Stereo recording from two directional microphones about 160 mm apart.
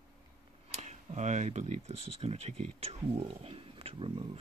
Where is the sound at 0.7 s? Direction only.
45° right (ahead or behind).